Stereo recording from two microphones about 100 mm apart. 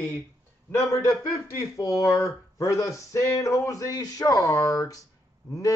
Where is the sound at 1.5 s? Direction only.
35° left (ahead or behind).